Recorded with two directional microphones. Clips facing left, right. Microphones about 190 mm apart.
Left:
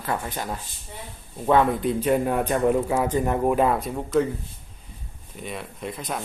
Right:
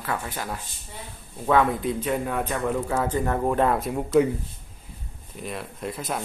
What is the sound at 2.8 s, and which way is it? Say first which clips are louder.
Speech: left 2 dB; 15° left (ahead or behind).